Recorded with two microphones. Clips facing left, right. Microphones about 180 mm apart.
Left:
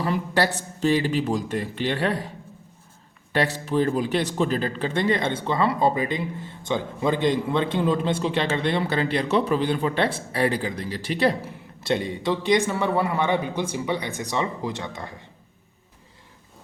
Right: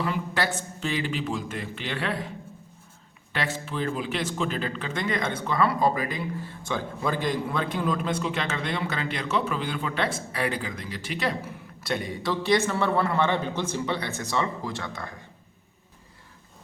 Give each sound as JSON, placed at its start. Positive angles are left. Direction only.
{"t": 0.0, "sound": "speech", "side_deg": 40}
{"t": 3.3, "sound": "a man's voice", "side_deg": 35}